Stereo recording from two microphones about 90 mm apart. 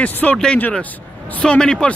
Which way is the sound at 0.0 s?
15° left (ahead or behind).